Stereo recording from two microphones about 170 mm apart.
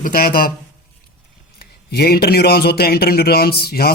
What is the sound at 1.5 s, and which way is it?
A man's voice, 65° left (ahead or behind).